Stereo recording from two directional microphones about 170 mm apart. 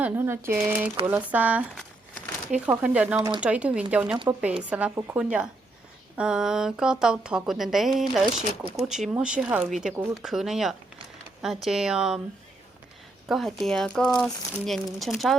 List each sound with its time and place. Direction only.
0.0 s speech: 15° right (ahead or behind)
2.6 s speech: 5° right (ahead or behind)
3.2 s speech: 20° right (ahead or behind)
3.4 s a woman's voice: 10° right (ahead or behind)
13.2 s a woman's voice: centre (ahead or behind)